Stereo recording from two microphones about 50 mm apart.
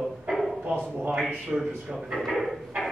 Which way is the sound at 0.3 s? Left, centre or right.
Centre.